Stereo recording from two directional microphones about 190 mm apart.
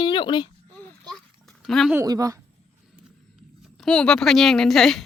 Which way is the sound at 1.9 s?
15° right (ahead or behind).